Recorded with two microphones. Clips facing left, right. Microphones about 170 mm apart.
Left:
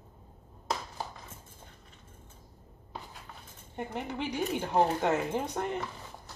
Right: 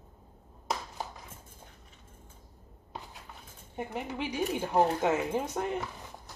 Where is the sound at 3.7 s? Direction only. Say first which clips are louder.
Even; 10° right (ahead or behind).